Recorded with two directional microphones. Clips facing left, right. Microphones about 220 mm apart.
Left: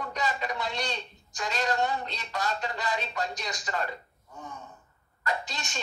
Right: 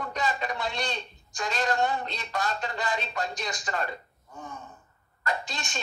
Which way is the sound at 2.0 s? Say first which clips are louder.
Right 1 dB; 50° right (ahead or behind).